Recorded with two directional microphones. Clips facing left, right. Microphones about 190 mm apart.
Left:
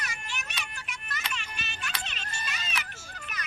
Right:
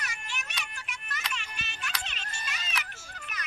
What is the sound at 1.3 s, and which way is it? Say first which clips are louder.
Music: left 1 dB; 35° left (ahead or behind).